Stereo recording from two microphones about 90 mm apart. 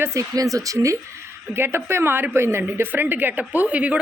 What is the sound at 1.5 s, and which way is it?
A woman's voice, 25° right (ahead or behind).